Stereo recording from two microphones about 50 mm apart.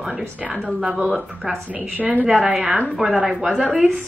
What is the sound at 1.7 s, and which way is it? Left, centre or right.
Speech, right.